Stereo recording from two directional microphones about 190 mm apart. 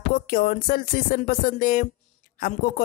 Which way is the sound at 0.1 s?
45° left (ahead or behind).